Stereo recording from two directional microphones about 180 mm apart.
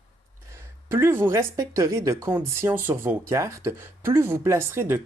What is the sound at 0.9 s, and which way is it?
Speech, 15° right (ahead or behind).